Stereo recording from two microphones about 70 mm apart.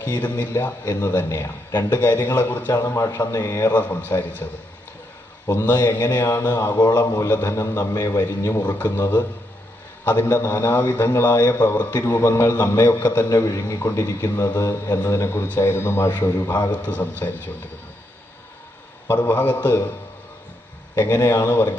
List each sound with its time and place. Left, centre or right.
0.0 s a man's voice: left
2.9 s a man's voice: left
3.7 s a man's voice: left
5.6 s a man's voice: left
7.0 s a man's voice: left
8.6 s a man's voice: left
12.8 s a man's voice: left
13.2 s a man's voice: left
19.0 s a man's voice: left
20.9 s a man's voice: left